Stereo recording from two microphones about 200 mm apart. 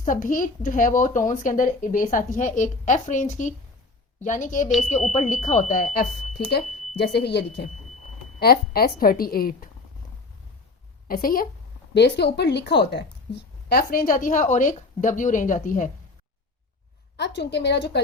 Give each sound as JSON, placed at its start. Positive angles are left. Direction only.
{"t": 0.0, "sound": "a woman's voice", "side_deg": 40}
{"t": 11.1, "sound": "a woman's voice", "side_deg": 45}
{"t": 11.9, "sound": "a woman's voice", "side_deg": 55}
{"t": 17.2, "sound": "speech", "side_deg": 60}